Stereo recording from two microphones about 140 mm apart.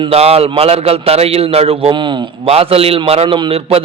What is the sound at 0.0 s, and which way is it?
A man's voice, 45° right (ahead or behind).